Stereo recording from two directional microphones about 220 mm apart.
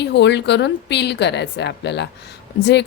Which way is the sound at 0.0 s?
50° left (ahead or behind).